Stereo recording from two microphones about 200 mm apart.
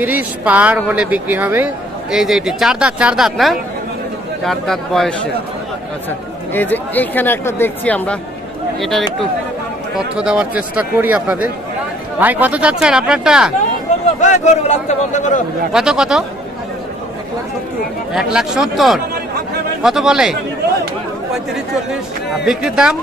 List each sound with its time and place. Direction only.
0.0 s speech: 10° right (ahead or behind)
6.5 s speech: 10° left (ahead or behind)
9.9 s speech: 5° right (ahead or behind)
14.2 s a man's voice: 35° left (ahead or behind)
15.7 s speech: 5° right (ahead or behind)
18.1 s speech: centre (ahead or behind)
22.4 s speech: 5° right (ahead or behind)